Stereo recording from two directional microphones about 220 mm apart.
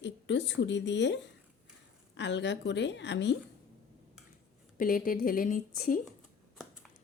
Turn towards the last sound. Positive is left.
turn(degrees=35)  # may be behind; listen again after turning